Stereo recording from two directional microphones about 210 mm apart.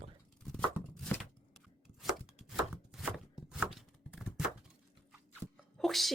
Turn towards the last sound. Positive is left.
turn(degrees=0)  # may be behind; listen again after turning